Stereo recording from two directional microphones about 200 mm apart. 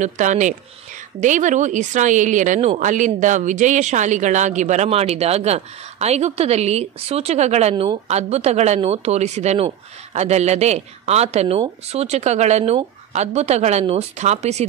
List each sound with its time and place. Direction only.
0.0 s a woman's voice: 40° right (ahead or behind)